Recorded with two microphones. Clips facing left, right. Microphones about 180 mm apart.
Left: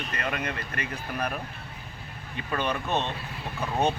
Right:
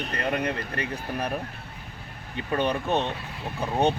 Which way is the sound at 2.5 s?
30° right (ahead or behind).